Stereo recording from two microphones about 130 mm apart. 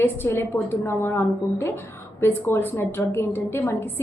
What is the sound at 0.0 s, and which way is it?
A woman's voice, 20° left (ahead or behind).